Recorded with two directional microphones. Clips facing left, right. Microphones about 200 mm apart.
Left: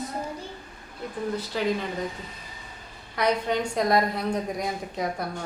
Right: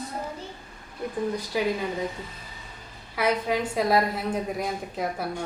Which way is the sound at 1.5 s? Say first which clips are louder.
Right 2 dB; 10° right (ahead or behind).